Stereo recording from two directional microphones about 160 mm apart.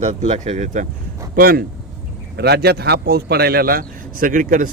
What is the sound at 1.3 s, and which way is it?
Speech, 65° right (ahead or behind).